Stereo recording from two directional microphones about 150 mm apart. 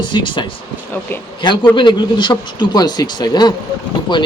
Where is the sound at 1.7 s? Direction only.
30° left (ahead or behind).